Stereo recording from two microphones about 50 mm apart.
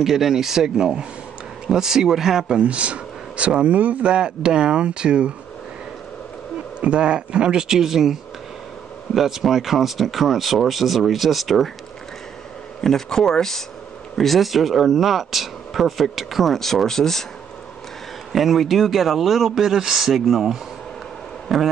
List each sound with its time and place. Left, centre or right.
0.0 s speech: centre
2.4 s speech: right
4.1 s speech: centre
6.8 s speech: centre
12.8 s speech: centre
18.3 s speech: centre